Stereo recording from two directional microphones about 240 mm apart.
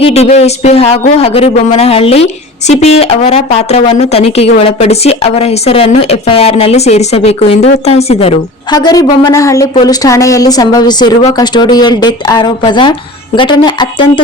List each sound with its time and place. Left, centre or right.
0.0 s a woman's voice: left